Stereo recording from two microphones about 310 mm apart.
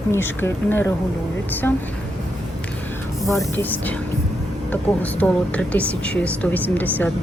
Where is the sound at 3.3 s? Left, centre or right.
Centre.